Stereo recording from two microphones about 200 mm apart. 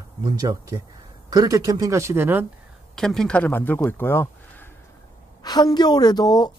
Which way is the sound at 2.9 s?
5° left (ahead or behind).